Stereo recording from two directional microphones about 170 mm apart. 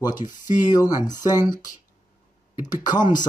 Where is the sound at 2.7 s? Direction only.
25° left (ahead or behind).